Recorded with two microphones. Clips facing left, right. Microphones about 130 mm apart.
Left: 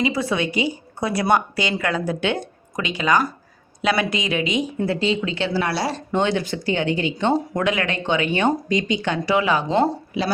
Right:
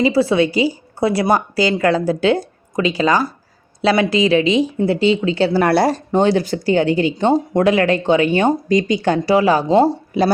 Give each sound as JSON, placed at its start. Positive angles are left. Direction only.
{"t": 0.0, "sound": "a woman's voice", "side_deg": -30}
{"t": 5.5, "sound": "speech", "side_deg": -55}
{"t": 6.1, "sound": "a woman's voice", "side_deg": -35}